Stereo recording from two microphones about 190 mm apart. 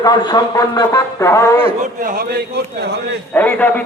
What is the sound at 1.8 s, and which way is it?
Speech, 45° right (ahead or behind).